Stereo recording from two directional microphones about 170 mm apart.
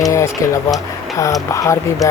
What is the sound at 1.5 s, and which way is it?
Speech, 15° left (ahead or behind).